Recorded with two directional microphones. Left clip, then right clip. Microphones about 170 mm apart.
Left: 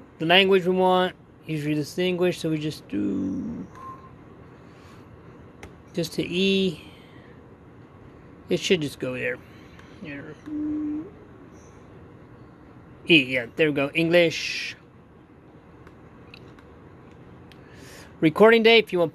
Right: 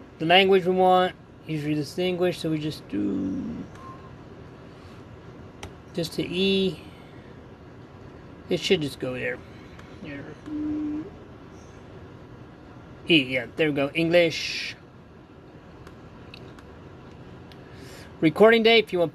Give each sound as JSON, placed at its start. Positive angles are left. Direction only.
{"t": 0.2, "sound": "speech", "side_deg": 30}
{"t": 5.9, "sound": "speech", "side_deg": 40}
{"t": 8.5, "sound": "speech", "side_deg": 35}
{"t": 13.0, "sound": "speech", "side_deg": 35}
{"t": 18.2, "sound": "speech", "side_deg": 35}